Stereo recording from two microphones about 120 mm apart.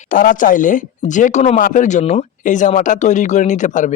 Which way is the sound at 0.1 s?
90° left.